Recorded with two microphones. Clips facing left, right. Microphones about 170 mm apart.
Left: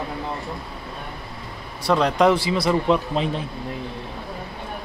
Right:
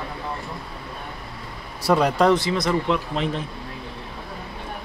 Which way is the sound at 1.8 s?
10° right (ahead or behind).